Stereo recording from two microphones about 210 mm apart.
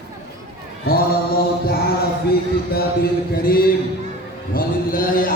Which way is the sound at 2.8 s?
45° left (ahead or behind).